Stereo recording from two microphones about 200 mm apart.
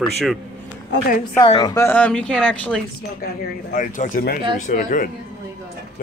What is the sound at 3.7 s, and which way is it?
Speech, 40° left (ahead or behind).